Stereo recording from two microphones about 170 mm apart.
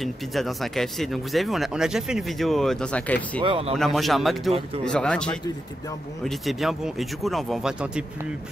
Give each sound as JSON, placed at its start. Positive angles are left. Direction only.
{"t": 0.0, "sound": "speech", "side_deg": 0}
{"t": 3.3, "sound": "speech", "side_deg": -30}
{"t": 3.7, "sound": "speech", "side_deg": 0}